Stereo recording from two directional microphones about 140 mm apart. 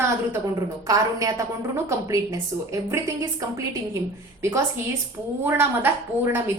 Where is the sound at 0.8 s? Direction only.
25° right (ahead or behind).